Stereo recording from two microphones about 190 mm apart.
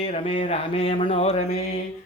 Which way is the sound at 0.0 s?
30° left (ahead or behind).